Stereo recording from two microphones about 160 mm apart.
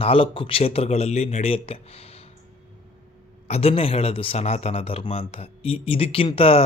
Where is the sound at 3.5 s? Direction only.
40° left (ahead or behind).